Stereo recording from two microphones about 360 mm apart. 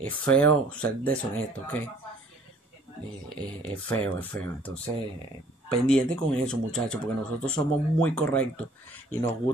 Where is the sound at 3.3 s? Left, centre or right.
Centre.